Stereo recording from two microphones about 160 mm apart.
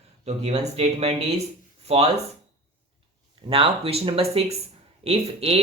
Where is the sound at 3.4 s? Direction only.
35° right (ahead or behind).